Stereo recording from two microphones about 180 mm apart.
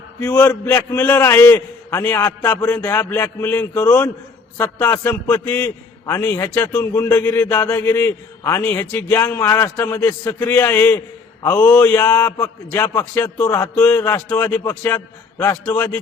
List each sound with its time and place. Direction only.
0.2 s a man's voice: 10° left (ahead or behind)